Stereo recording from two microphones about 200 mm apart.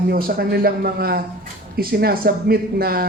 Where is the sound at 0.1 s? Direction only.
50° right (ahead or behind).